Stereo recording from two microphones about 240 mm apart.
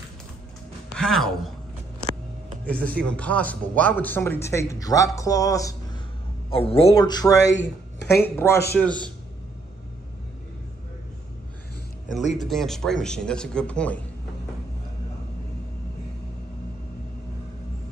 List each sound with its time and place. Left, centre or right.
0.9 s speech: centre
2.7 s a man's voice: centre
6.5 s a man's voice: left
7.5 s speech: left
8.2 s a man's voice: centre
12.2 s speech: left
12.4 s speech: centre